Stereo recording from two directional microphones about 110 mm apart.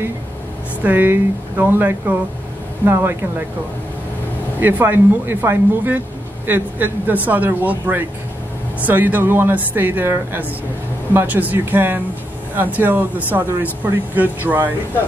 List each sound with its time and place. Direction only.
0.8 s speech: 15° right (ahead or behind)
4.6 s speech: 15° right (ahead or behind)